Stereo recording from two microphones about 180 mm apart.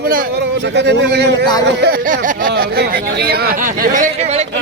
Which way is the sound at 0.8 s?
70° right (ahead or behind).